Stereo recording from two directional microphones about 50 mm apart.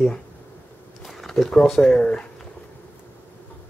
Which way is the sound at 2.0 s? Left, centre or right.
Left.